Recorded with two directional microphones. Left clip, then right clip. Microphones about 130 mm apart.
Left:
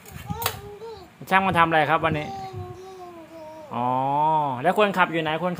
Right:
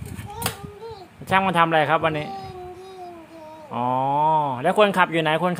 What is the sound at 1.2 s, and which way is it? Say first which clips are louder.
Speech: right 1 dB; 5° right (ahead or behind).